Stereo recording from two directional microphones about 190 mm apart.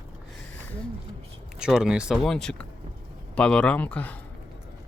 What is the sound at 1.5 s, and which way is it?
Speech, 5° right (ahead or behind).